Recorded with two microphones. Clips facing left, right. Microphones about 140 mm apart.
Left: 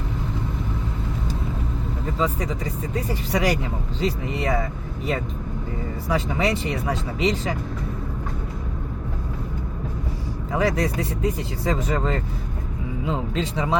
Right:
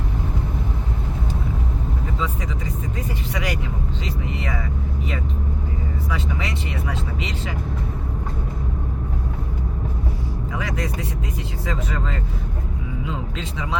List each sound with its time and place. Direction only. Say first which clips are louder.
2.9 s speech: left 7 dB; 35° left (ahead or behind)
6.1 s speech: left 8 dB; 40° left (ahead or behind)
10.5 s speech: left 7 dB; 35° left (ahead or behind)